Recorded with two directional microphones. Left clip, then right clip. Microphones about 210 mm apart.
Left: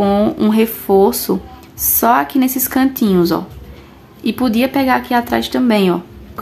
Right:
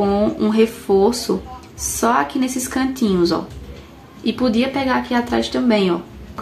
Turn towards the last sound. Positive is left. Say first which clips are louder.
# left 3 dB
turn(degrees=35)  # may be behind; listen again after turning